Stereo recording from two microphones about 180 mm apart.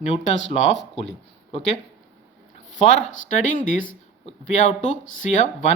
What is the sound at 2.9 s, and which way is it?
Speech, 45° left (ahead or behind).